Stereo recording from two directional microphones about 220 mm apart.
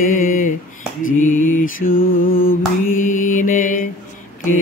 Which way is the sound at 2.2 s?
40° left (ahead or behind).